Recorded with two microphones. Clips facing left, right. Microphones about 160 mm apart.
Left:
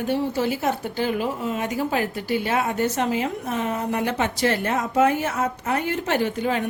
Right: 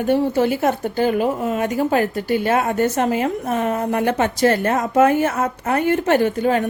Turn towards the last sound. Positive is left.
turn(degrees=-50)  # may be behind; listen again after turning